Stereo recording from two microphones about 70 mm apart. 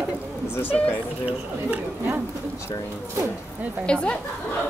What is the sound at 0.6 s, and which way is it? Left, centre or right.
Speech, left.